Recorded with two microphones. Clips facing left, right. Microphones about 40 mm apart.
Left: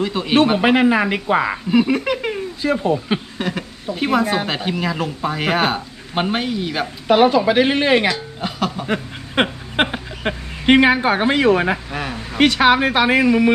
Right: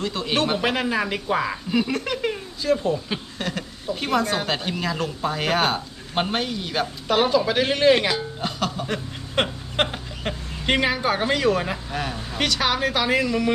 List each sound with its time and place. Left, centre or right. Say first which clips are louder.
0.0 s speech: left 7 dB; centre
1.7 s a sound: left 7 dB; centre
2.6 s speech: left 3 dB; left
3.3 s speech: left 5 dB; centre
8.0 s speech: left 3 dB; centre
8.9 s speech: left 6 dB; left